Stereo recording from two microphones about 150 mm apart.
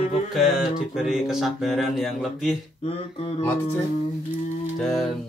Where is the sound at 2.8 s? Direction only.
40° left (ahead or behind).